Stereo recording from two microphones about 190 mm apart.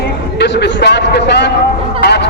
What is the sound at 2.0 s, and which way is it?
Fowl, 60° left (ahead or behind).